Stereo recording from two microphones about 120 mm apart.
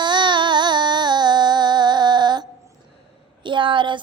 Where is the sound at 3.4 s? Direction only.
40° right (ahead or behind).